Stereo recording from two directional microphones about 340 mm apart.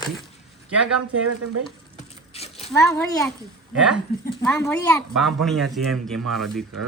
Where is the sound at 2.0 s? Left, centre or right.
Centre.